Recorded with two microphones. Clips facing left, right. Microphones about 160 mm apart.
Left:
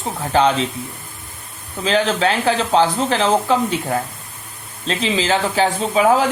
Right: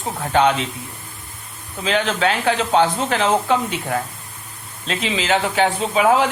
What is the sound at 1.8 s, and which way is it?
Speech, 35° left (ahead or behind).